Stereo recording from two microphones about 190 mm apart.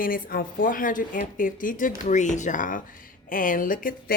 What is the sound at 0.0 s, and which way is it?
Speech, 50° left (ahead or behind).